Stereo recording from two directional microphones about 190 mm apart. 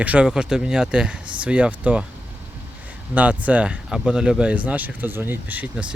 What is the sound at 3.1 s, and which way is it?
Speech, 10° right (ahead or behind).